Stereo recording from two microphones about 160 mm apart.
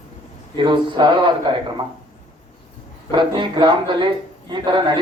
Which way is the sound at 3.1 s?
30° right (ahead or behind).